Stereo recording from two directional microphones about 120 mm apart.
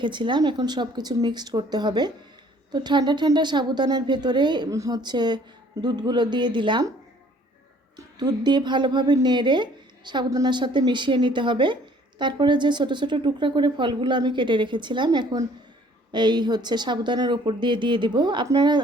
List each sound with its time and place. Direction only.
0.0 s a woman's voice: 40° right (ahead or behind)
8.2 s a woman's voice: 35° right (ahead or behind)